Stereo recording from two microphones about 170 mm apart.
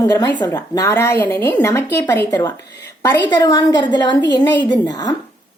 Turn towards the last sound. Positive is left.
turn(degrees=25)  # may be behind; listen again after turning